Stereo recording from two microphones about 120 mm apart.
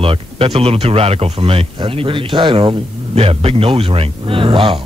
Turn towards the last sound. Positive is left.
turn(degrees=-45)  # may be behind; listen again after turning